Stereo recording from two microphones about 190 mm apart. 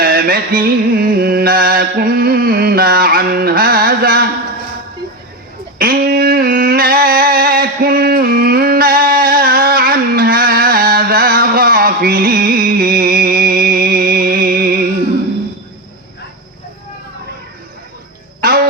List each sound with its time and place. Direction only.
0.0 s music: 50° right (ahead or behind)
5.8 s a sound: 50° right (ahead or behind)
18.4 s music: 50° right (ahead or behind)